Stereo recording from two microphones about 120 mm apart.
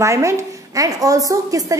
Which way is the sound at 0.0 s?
25° right (ahead or behind).